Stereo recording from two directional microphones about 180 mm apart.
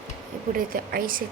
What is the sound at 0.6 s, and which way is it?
Speech, 55° right (ahead or behind).